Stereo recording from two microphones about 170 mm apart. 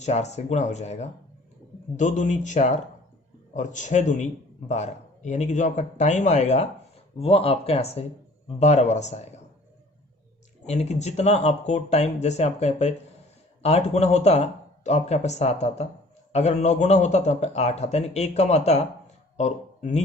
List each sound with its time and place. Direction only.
0.0 s speech: 40° left (ahead or behind)
10.7 s speech: 40° left (ahead or behind)